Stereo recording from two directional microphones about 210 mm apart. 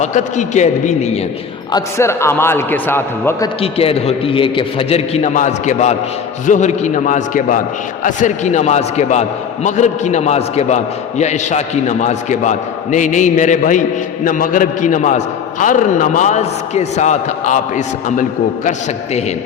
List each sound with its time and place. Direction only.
0.0 s a man's voice: 35° left (ahead or behind)
1.7 s a man's voice: 15° left (ahead or behind)
3.6 s a man's voice: 25° left (ahead or behind)